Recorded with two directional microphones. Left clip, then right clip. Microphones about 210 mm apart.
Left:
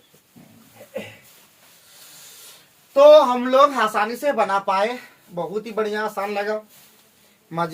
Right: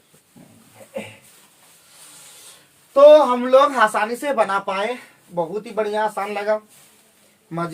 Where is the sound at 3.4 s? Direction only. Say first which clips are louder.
Right 2 dB; 20° right (ahead or behind).